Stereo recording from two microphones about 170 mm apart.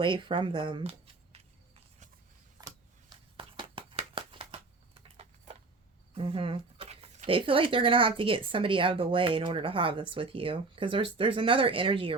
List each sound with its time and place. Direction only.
0.0 s speech: 30° right (ahead or behind)
3.3 s a sound: 30° right (ahead or behind)
7.3 s speech: 30° right (ahead or behind)